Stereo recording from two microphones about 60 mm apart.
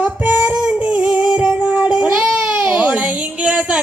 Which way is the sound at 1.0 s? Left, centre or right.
Centre.